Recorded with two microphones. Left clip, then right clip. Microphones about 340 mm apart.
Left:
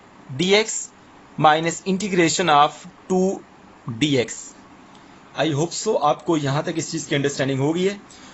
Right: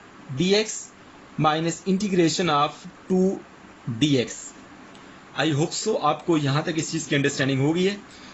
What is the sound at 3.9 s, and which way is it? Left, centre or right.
Speech, centre.